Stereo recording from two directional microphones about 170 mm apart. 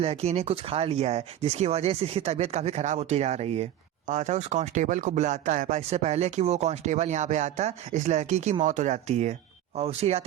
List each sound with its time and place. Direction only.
0.0 s speech: 40° right (ahead or behind)